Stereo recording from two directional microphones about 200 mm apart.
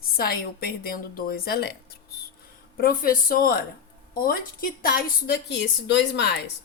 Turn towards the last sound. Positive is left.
turn(degrees=60)  # may be behind; listen again after turning